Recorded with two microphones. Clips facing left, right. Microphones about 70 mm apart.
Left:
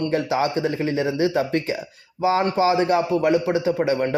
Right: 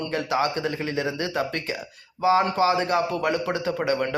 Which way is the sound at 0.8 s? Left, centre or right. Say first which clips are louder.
Left 5 dB; left.